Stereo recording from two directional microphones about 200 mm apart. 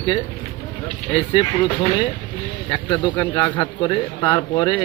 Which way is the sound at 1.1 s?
25° left (ahead or behind).